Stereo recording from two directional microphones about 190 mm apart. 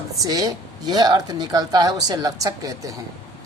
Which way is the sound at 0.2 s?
20° right (ahead or behind).